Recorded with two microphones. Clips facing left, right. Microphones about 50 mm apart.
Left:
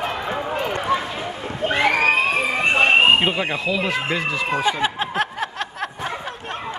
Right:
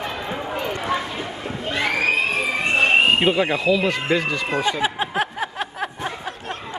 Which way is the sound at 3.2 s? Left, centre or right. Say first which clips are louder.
Right 2 dB; centre.